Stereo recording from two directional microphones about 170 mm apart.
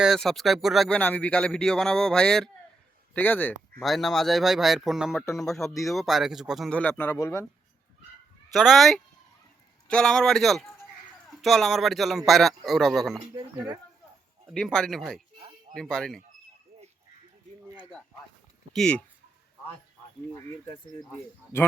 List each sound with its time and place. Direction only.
0.0 s speech: centre (ahead or behind)
8.5 s speech: centre (ahead or behind)
13.3 s speech: 20° right (ahead or behind)
14.5 s speech: 5° left (ahead or behind)
18.7 s speech: 5° left (ahead or behind)
21.0 s speech: 10° left (ahead or behind)